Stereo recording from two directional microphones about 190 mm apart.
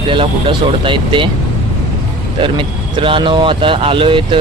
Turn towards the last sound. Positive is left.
turn(degrees=-25)  # may be behind; listen again after turning